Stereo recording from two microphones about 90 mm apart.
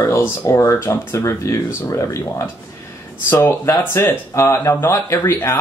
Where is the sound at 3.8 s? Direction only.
25° left (ahead or behind).